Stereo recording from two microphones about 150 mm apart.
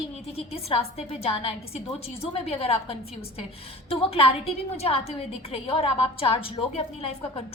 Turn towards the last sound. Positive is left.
turn(degrees=40)  # may be behind; listen again after turning